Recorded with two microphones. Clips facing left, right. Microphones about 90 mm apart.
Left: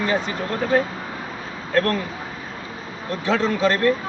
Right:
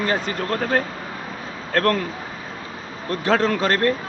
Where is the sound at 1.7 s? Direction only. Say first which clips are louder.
Right 1 dB; 55° right (ahead or behind).